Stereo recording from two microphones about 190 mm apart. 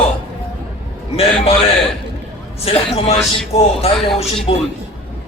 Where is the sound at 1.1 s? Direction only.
30° left (ahead or behind).